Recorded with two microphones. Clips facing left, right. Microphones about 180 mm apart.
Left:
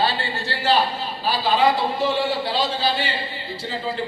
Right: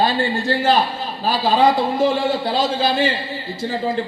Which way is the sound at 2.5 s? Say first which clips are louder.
Right 4 dB; 45° right (ahead or behind).